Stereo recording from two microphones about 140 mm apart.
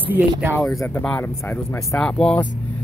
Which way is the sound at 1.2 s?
20° left (ahead or behind).